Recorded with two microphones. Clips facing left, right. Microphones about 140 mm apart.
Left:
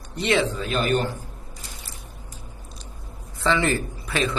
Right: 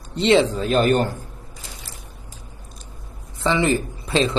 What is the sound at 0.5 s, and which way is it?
Speech, 40° right (ahead or behind).